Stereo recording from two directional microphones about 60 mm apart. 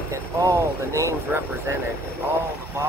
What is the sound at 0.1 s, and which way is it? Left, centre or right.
Speech, right.